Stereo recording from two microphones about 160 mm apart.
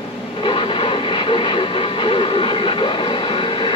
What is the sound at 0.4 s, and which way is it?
Vehicle, 30° left (ahead or behind).